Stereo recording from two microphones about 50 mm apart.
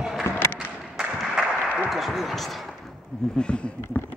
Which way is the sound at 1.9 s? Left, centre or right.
Centre.